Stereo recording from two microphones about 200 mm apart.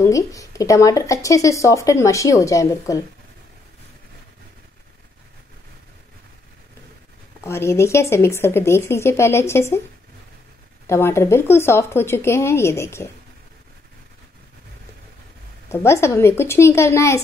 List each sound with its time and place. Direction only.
0.0 s speech: 15° left (ahead or behind)
7.4 s speech: 15° left (ahead or behind)
10.9 s speech: 15° left (ahead or behind)
15.7 s speech: 15° left (ahead or behind)